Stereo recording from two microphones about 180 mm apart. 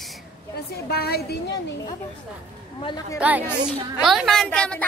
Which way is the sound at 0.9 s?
60° left (ahead or behind).